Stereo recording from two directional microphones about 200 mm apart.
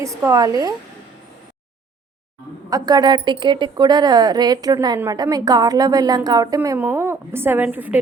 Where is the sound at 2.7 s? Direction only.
20° right (ahead or behind).